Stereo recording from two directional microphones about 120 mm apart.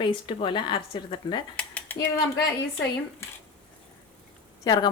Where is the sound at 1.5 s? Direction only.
10° left (ahead or behind).